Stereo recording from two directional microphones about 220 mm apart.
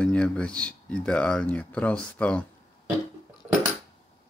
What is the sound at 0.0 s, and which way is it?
Speech, 5° left (ahead or behind).